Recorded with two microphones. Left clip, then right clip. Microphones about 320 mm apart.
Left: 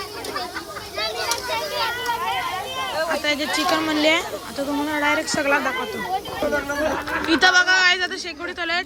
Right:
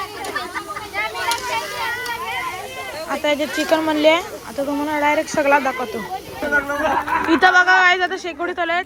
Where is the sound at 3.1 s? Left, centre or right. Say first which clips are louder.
Right 7 dB; centre.